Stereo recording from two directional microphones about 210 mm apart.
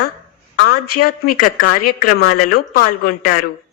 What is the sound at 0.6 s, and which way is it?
A woman's voice, 45° left (ahead or behind).